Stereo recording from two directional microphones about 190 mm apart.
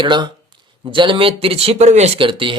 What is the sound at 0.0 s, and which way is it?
Speech, 25° right (ahead or behind).